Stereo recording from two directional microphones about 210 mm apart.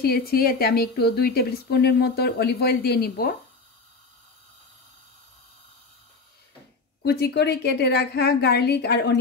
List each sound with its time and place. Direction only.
0.0 s speech: 45° left (ahead or behind)
7.1 s speech: 50° left (ahead or behind)